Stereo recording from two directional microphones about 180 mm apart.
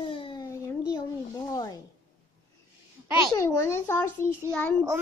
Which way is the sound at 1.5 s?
20° left (ahead or behind).